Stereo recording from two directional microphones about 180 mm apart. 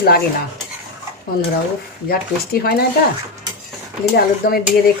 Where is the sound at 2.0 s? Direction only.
60° left (ahead or behind).